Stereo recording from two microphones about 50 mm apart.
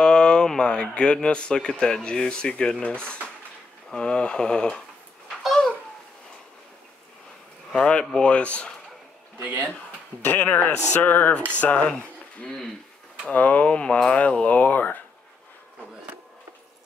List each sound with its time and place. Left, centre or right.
0.0 s speech: centre
5.4 s babbling: centre
7.7 s speech: centre
10.2 s speech: left
13.3 s speech: left